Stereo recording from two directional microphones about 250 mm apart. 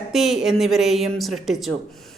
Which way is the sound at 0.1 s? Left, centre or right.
Centre.